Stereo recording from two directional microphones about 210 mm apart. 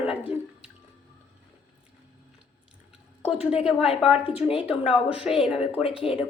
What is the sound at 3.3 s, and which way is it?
Speech, 5° right (ahead or behind).